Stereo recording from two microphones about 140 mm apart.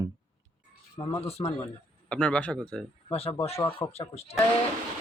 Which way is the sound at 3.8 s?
35° left (ahead or behind).